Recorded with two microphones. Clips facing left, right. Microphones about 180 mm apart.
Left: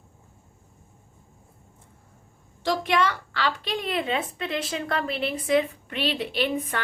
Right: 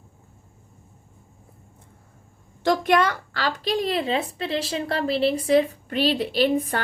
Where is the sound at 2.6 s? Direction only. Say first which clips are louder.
Right 4 dB; 45° right (ahead or behind).